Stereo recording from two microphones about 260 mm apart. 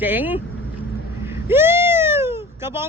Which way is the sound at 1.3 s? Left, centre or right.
Centre.